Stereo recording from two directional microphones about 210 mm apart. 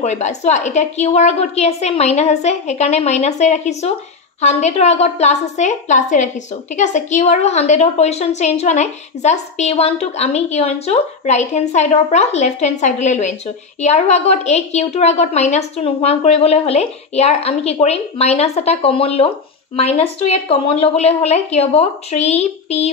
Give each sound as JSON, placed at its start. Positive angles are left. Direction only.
{"t": 0.0, "sound": "a woman's voice", "side_deg": 35}